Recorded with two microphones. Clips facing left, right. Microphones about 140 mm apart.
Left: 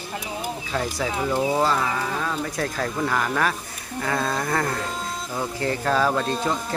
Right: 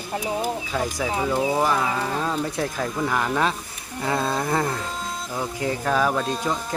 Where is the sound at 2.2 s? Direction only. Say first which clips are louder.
Right 2 dB; 25° right (ahead or behind).